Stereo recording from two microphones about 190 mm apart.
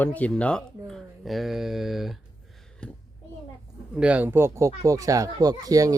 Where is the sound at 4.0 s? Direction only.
5° right (ahead or behind).